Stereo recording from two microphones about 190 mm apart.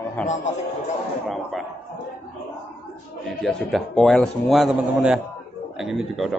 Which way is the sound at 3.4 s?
Centre (ahead or behind).